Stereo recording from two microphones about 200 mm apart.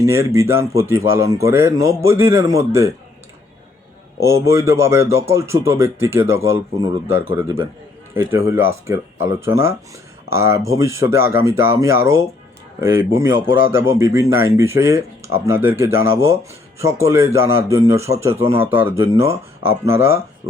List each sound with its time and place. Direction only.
0.0 s speech: 15° right (ahead or behind)
4.2 s speech: 15° right (ahead or behind)